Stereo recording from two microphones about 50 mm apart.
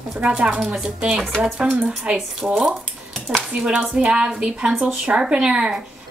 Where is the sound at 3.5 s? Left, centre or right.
Centre.